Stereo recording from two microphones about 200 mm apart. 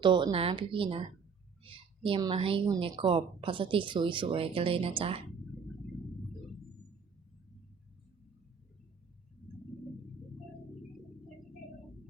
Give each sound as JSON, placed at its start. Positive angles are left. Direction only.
{"t": 0.0, "sound": "a woman's voice", "side_deg": -25}